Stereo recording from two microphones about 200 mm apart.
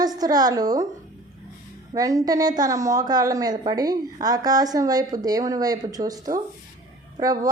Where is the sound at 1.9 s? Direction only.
15° right (ahead or behind).